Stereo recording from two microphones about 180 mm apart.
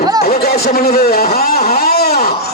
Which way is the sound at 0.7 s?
60° left (ahead or behind).